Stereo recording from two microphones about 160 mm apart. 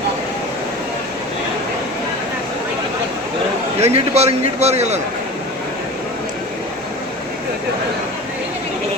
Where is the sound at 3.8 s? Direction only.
40° right (ahead or behind).